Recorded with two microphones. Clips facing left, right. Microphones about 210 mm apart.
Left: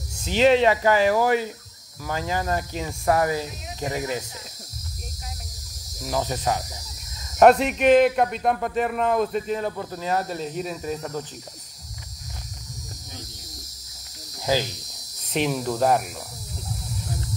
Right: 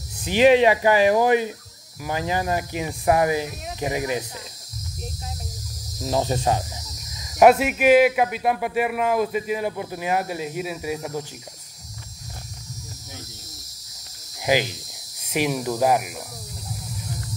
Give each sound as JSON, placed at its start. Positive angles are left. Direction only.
{"t": 0.2, "sound": "speech", "side_deg": -15}
{"t": 6.0, "sound": "speech", "side_deg": -25}
{"t": 7.3, "sound": "speech", "side_deg": -5}
{"t": 14.4, "sound": "cricket", "side_deg": -15}
{"t": 15.3, "sound": "speech", "side_deg": -5}